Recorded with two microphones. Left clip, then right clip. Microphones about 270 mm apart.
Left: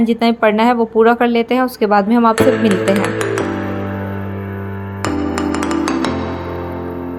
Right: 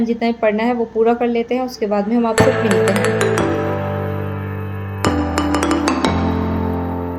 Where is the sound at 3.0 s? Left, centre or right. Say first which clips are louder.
Right 1 dB; centre.